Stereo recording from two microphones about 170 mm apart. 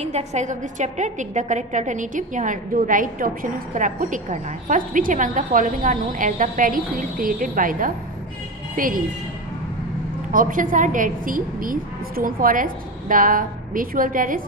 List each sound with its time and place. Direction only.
0.0 s a woman's voice: 40° right (ahead or behind)
10.3 s a woman's voice: 55° right (ahead or behind)